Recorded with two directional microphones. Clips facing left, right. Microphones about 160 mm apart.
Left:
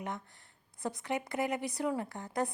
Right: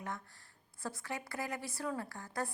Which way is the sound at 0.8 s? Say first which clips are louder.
Left 6 dB; 20° left (ahead or behind).